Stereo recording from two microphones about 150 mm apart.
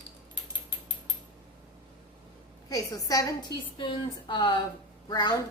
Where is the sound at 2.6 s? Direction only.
25° left (ahead or behind).